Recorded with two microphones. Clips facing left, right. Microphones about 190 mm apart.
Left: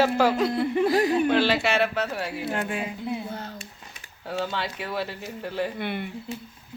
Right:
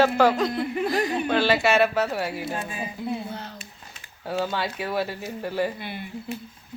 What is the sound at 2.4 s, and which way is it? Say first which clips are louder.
Speech: left 2 dB; 70° left (ahead or behind).